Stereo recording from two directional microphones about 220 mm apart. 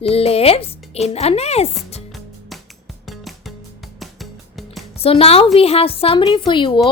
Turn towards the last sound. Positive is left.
turn(degrees=20)  # may be behind; listen again after turning